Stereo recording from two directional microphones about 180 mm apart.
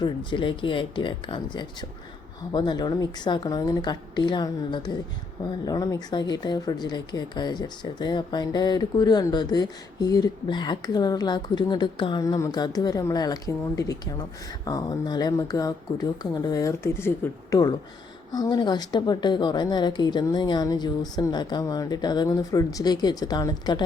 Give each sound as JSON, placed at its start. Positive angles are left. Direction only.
{"t": 0.0, "sound": "speech", "side_deg": 25}